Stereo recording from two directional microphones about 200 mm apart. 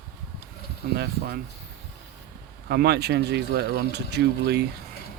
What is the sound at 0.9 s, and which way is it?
Speech, 50° right (ahead or behind).